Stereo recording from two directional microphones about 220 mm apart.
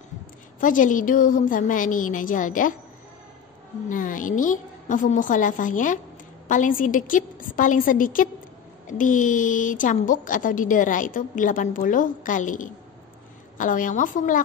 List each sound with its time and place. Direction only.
0.6 s a woman's voice: 35° left (ahead or behind)
3.9 s a woman's voice: 35° left (ahead or behind)